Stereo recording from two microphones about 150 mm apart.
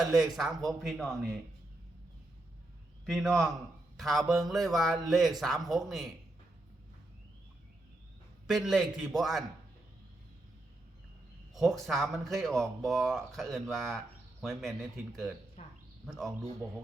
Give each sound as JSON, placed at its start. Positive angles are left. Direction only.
{"t": 0.0, "sound": "speech", "side_deg": 0}
{"t": 3.1, "sound": "speech", "side_deg": 5}
{"t": 8.4, "sound": "speech", "side_deg": 0}
{"t": 11.5, "sound": "speech", "side_deg": 0}
{"t": 15.6, "sound": "a sound", "side_deg": 50}
{"t": 16.1, "sound": "speech", "side_deg": 0}